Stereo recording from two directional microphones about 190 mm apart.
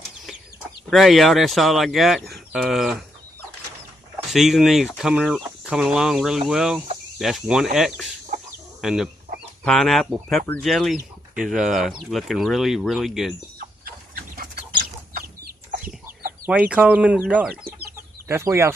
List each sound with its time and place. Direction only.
0.8 s speech: centre (ahead or behind)
4.3 s speech: centre (ahead or behind)
13.8 s chicken: 50° right (ahead or behind)
16.4 s speech: 5° right (ahead or behind)